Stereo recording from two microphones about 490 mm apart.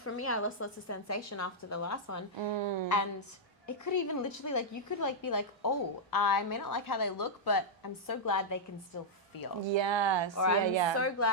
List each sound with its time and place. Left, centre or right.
0.0 s a woman's voice: left
2.4 s speech: right
3.7 s a woman's voice: left
9.6 s speech: right
10.3 s a woman's voice: left
10.7 s speech: right
10.9 s a woman's voice: left